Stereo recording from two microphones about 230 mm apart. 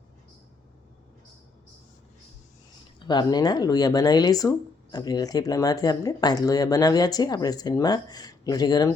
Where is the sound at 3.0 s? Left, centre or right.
Centre.